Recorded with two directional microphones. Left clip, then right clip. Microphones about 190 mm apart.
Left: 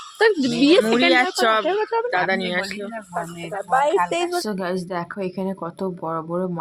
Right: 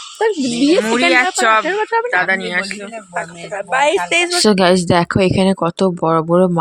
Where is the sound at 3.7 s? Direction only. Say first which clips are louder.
Right 4 dB; 20° right (ahead or behind).